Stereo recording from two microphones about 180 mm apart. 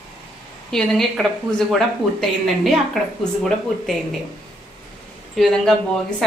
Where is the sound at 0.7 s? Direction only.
5° left (ahead or behind).